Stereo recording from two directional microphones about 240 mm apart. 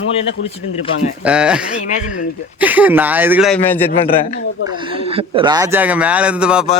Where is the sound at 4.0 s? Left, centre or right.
Left.